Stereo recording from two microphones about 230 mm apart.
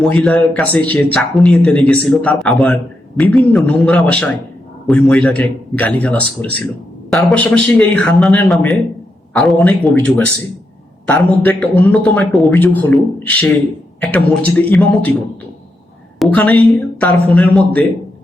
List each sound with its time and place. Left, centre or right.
0.0 s speech: centre
11.0 s a man's voice: centre
16.1 s a woman's voice: centre